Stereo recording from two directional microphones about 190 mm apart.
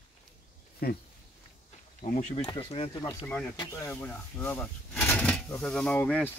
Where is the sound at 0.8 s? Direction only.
55° left (ahead or behind).